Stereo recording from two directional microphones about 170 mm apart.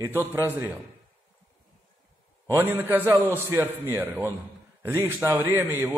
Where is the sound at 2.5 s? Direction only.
15° right (ahead or behind).